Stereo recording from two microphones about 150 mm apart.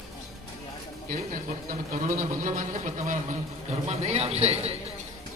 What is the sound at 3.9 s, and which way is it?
Speech, 45° right (ahead or behind).